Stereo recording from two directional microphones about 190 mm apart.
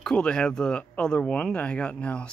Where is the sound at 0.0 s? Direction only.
5° left (ahead or behind).